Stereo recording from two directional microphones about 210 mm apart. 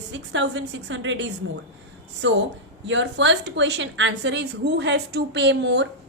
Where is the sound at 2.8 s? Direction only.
60° right (ahead or behind).